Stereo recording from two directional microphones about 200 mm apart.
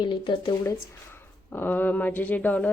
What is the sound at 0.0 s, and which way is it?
Speech, 20° left (ahead or behind).